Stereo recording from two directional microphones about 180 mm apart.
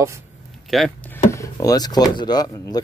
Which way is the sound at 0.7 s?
Centre (ahead or behind).